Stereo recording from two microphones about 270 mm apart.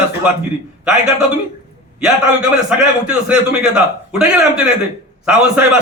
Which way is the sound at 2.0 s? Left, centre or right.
Centre.